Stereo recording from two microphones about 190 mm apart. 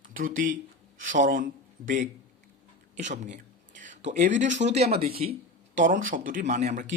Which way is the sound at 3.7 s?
40° right (ahead or behind).